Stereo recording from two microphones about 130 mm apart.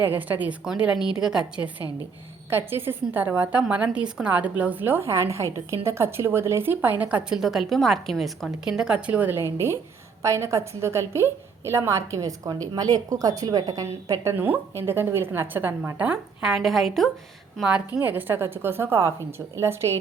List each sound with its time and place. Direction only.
0.0 s a woman's voice: 15° right (ahead or behind)
2.5 s a woman's voice: 15° right (ahead or behind)